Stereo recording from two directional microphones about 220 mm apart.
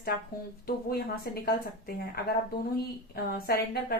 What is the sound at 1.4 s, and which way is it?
Speech, 45° left (ahead or behind).